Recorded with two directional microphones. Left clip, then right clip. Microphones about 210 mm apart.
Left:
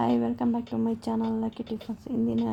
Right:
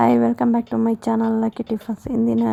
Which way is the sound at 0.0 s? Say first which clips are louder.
Right 10 dB; 40° right (ahead or behind).